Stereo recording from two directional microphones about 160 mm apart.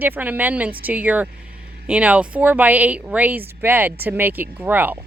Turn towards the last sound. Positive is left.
turn(degrees=-10)  # may be behind; listen again after turning